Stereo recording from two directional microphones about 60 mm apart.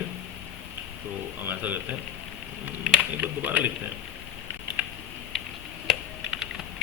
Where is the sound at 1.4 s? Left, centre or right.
Right.